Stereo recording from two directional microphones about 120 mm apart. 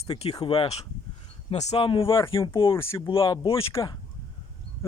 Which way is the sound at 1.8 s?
45° left (ahead or behind).